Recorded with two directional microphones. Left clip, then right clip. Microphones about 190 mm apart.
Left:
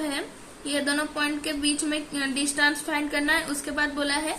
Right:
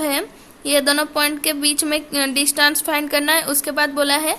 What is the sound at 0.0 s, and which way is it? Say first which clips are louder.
A woman's voice: right 9 dB; 70° right (ahead or behind).